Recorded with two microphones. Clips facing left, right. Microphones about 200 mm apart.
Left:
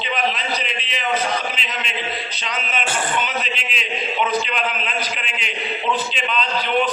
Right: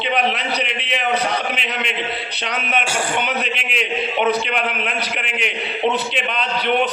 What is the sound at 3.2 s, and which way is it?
A man's voice, 65° right (ahead or behind).